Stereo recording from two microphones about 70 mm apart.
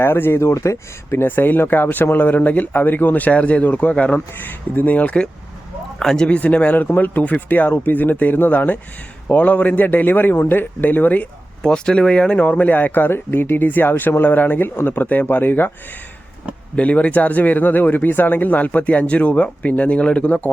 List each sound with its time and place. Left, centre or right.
0.0 s speech: left
11.6 s speech: centre; by 15.7 s left
16.7 s speech: centre